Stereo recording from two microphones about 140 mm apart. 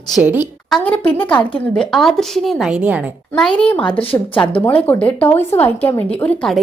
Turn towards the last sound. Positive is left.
turn(degrees=10)  # may be behind; listen again after turning